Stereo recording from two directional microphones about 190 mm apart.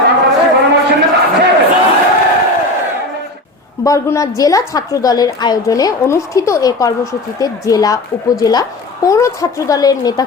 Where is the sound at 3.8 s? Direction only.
15° left (ahead or behind).